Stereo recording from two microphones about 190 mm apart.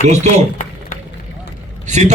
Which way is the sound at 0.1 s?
35° right (ahead or behind).